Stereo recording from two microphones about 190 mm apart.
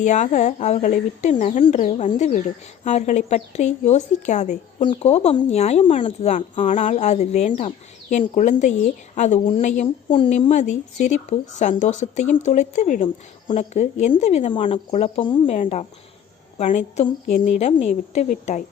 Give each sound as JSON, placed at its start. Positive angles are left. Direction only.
{"t": 0.0, "sound": "a woman's voice", "side_deg": 40}